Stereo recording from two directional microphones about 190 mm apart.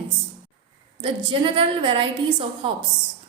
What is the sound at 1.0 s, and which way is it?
A woman's voice, 25° right (ahead or behind).